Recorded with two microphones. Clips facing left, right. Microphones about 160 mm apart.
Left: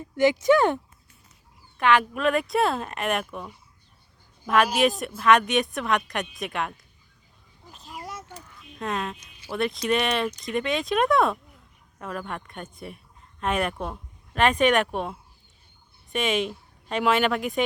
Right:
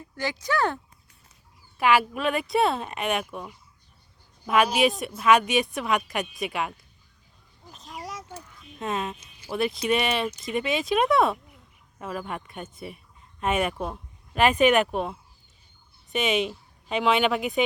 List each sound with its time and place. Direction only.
0.0 s speech: 20° left (ahead or behind)
1.8 s speech: 5° right (ahead or behind)
7.7 s vehicle: centre (ahead or behind)
8.8 s speech: 5° right (ahead or behind)
16.1 s speech: centre (ahead or behind)